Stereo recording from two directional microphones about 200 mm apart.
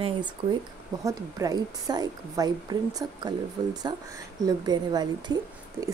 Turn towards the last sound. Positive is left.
turn(degrees=-20)  # may be behind; listen again after turning